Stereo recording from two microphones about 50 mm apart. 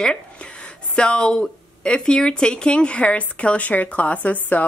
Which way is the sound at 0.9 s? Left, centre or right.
Centre.